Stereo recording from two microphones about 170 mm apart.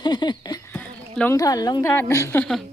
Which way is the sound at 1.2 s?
20° left (ahead or behind).